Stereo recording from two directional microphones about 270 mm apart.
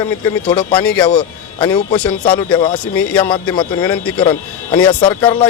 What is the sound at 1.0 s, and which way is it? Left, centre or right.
A man's voice, centre.